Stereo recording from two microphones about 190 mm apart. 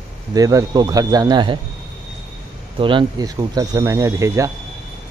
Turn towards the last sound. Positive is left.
turn(degrees=-15)  # may be behind; listen again after turning